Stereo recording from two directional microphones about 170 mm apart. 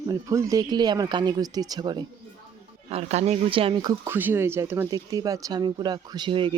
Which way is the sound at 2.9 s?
40° right (ahead or behind).